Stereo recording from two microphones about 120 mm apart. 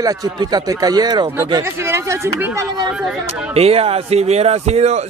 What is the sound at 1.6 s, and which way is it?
Speech, 20° right (ahead or behind).